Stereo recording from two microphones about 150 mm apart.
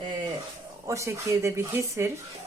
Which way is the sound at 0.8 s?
20° right (ahead or behind).